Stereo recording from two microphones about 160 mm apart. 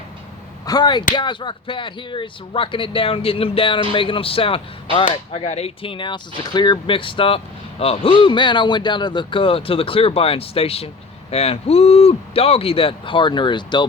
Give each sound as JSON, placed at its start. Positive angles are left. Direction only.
{"t": 0.6, "sound": "speech", "side_deg": 25}